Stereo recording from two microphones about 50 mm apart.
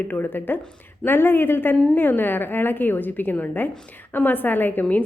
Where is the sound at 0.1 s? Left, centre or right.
Left.